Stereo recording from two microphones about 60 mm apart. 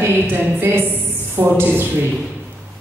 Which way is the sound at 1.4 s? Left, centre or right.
Right.